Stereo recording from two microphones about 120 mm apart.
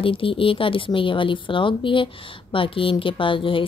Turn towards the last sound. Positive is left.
turn(degrees=45)  # may be behind; listen again after turning